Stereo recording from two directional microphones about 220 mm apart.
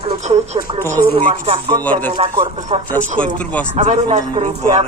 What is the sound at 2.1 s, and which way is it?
A man's voice, 25° right (ahead or behind).